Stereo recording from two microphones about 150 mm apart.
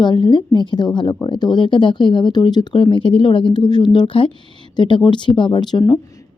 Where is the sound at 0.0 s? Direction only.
30° left (ahead or behind).